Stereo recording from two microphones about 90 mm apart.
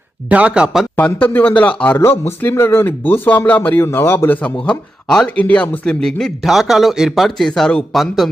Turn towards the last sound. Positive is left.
turn(degrees=5)  # may be behind; listen again after turning